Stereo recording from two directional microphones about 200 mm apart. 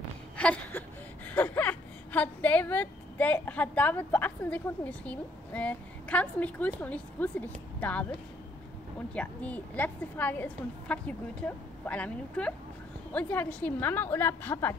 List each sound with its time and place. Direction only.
0.4 s a woman's voice: 10° left (ahead or behind)